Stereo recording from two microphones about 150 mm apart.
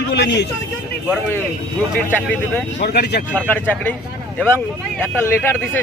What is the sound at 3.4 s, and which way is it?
Speech, 10° left (ahead or behind).